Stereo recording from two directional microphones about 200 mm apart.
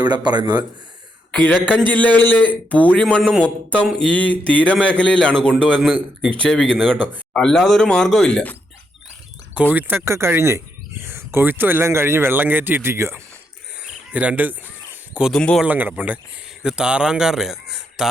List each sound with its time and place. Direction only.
0.0 s speech: 20° right (ahead or behind)
1.3 s a man's voice: 5° left (ahead or behind)
9.7 s speech: 10° right (ahead or behind)
13.8 s cricket: 5° right (ahead or behind)
15.1 s a man's voice: centre (ahead or behind)
15.6 s a man's voice: 10° right (ahead or behind)